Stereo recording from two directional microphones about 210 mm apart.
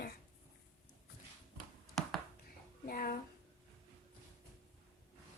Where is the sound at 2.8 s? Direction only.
45° left (ahead or behind).